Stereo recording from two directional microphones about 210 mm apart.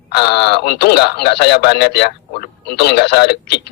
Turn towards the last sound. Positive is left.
turn(degrees=50)  # may be behind; listen again after turning